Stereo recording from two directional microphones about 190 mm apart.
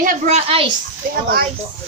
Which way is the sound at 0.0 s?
40° right (ahead or behind).